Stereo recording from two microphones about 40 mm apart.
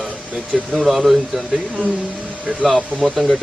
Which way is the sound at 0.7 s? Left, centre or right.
Centre.